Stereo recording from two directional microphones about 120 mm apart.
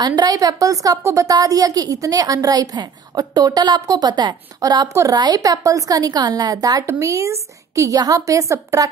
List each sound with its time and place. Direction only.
0.0 s a woman's voice: 35° right (ahead or behind)